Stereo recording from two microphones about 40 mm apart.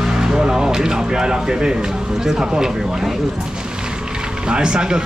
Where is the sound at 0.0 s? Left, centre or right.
Centre.